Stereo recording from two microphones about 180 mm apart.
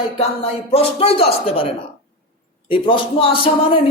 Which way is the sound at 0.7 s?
30° left (ahead or behind).